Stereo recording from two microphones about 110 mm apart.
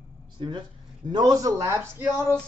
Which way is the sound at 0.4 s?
45° right (ahead or behind).